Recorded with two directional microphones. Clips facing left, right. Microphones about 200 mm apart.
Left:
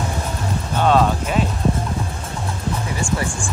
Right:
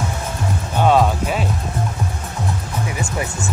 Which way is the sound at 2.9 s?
20° right (ahead or behind).